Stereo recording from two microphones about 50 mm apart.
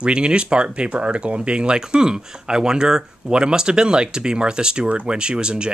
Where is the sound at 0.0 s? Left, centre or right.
Centre.